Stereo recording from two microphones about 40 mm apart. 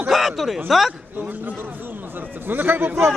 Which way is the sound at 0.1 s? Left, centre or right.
Centre.